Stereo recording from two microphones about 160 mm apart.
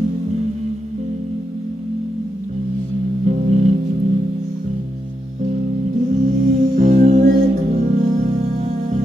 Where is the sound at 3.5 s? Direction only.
45° right (ahead or behind).